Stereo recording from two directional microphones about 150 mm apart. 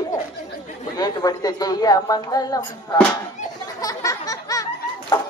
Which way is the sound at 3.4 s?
55° left (ahead or behind).